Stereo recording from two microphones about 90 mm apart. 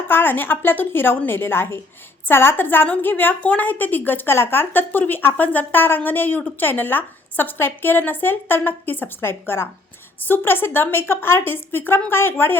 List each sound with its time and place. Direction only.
0.1 s a woman's voice: 25° left (ahead or behind)